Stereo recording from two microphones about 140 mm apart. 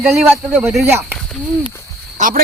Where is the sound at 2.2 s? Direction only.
60° right (ahead or behind).